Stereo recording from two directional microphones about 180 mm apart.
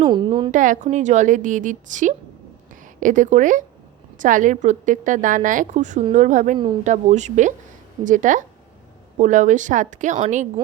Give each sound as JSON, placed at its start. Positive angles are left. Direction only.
{"t": 0.0, "sound": "a woman's voice", "side_deg": -25}
{"t": 0.5, "sound": "a woman's voice", "side_deg": -45}